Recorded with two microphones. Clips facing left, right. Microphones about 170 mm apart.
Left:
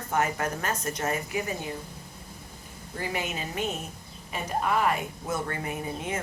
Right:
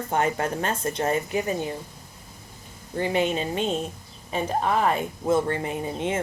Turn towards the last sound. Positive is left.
turn(degrees=-25)  # may be behind; listen again after turning